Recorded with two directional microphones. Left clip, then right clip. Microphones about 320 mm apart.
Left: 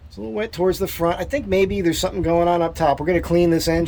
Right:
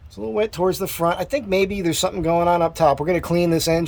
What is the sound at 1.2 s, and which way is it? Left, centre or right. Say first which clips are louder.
Speech: left 1 dB; centre.